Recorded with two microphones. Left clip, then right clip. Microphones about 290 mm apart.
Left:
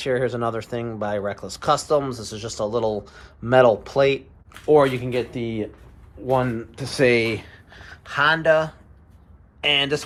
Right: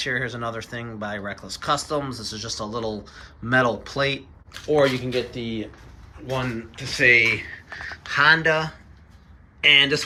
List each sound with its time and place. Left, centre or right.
0.0 s speech: centre
7.5 s a sound: left
7.9 s speech: centre